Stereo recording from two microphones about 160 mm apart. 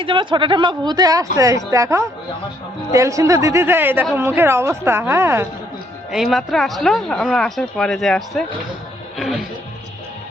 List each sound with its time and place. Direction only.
0.0 s a woman's voice: 30° right (ahead or behind)
6.1 s speech: centre (ahead or behind)